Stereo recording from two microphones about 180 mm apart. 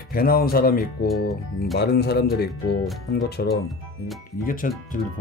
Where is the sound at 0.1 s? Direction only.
55° left (ahead or behind).